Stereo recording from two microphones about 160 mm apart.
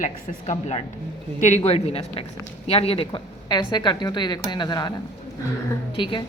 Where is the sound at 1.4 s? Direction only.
45° left (ahead or behind); by 4.9 s 25° left (ahead or behind).